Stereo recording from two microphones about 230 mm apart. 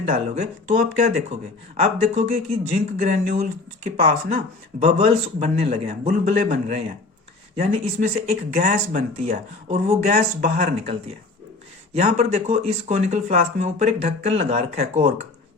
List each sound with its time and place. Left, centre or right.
0.0 s speech: right
4.8 s speech: right
11.9 s speech: right